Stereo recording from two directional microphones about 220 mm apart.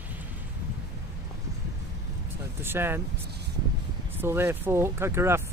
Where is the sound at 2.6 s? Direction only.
10° right (ahead or behind).